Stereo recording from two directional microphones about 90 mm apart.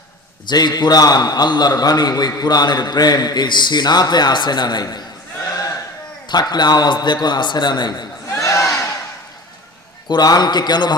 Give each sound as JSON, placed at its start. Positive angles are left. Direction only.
{"t": 0.4, "sound": "a man's voice", "side_deg": 50}
{"t": 5.5, "sound": "a sound", "side_deg": 40}
{"t": 6.2, "sound": "a man's voice", "side_deg": 50}
{"t": 8.3, "sound": "battle cry", "side_deg": 35}
{"t": 10.1, "sound": "a man's voice", "side_deg": 50}